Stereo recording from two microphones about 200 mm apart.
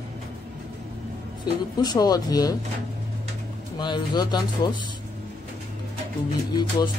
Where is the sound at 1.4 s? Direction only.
20° left (ahead or behind).